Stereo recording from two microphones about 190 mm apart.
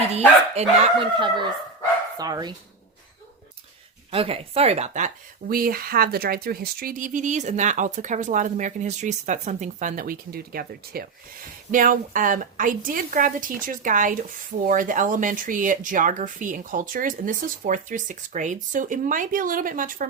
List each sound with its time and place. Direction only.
0.1 s speech: 35° right (ahead or behind)
4.1 s a woman's voice: 30° right (ahead or behind)